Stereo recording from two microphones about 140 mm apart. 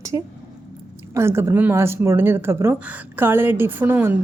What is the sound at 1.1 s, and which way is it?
Speech, 20° right (ahead or behind).